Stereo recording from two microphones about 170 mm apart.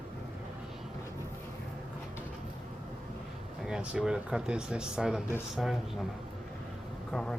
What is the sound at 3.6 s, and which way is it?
Speech, 5° right (ahead or behind).